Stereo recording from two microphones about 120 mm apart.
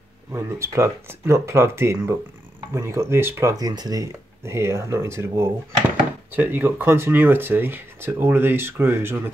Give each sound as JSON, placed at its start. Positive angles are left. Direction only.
{"t": 0.3, "sound": "speech", "side_deg": -25}